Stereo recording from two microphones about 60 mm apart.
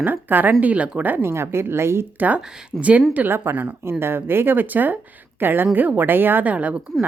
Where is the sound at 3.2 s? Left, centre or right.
Right.